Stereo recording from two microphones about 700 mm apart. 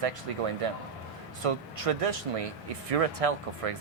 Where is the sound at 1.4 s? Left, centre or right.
Right.